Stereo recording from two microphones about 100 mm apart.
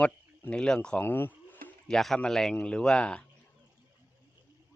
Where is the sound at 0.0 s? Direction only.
10° left (ahead or behind).